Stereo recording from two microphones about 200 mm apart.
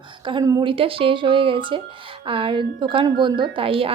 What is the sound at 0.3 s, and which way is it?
Speech, 20° right (ahead or behind).